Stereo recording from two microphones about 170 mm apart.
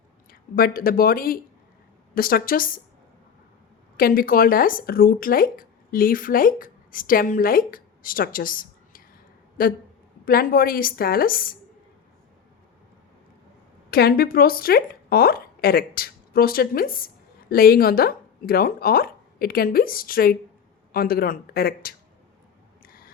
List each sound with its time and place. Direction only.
0.3 s speech: 60° left (ahead or behind)
3.9 s speech: 55° left (ahead or behind)
13.9 s a woman's voice: 65° left (ahead or behind)
22.8 s a sound: 60° left (ahead or behind)